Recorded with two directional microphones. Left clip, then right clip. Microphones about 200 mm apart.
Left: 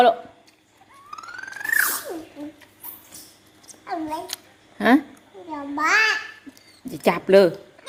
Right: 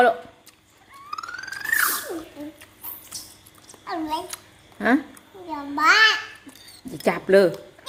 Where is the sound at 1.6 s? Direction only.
15° left (ahead or behind).